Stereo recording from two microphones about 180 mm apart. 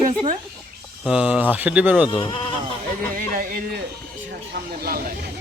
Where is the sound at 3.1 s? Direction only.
50° right (ahead or behind).